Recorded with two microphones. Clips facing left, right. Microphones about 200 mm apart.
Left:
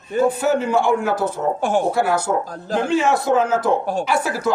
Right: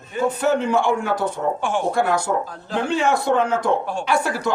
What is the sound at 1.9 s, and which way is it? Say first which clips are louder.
A man's voice: left 1 dB; 5° left (ahead or behind).